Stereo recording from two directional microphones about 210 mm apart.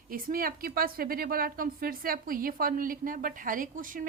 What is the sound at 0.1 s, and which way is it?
A woman's voice, 40° right (ahead or behind).